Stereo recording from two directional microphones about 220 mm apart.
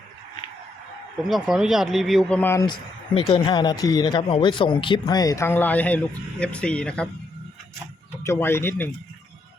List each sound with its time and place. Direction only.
1.3 s speech: centre (ahead or behind)
8.2 s speech: 10° left (ahead or behind)